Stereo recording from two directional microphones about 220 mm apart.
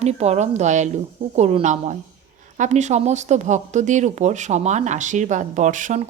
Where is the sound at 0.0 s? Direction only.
30° right (ahead or behind).